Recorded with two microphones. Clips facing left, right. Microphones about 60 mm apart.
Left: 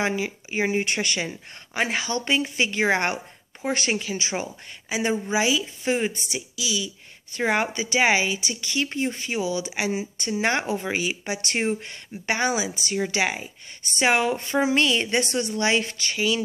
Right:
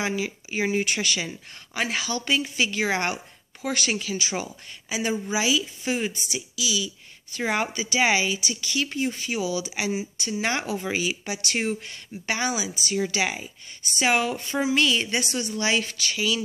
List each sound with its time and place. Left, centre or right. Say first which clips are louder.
0.0 s speech: left 2 dB; left
3.6 s a woman's voice: left 2 dB; left
10.6 s speech: left 1 dB; left
11.6 s a woman's voice: left 2 dB; left